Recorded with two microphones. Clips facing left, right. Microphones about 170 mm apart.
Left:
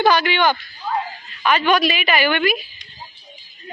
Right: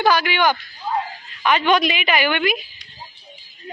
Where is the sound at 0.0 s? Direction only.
10° right (ahead or behind).